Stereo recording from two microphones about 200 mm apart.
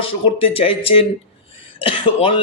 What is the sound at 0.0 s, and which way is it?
Speech, 30° left (ahead or behind).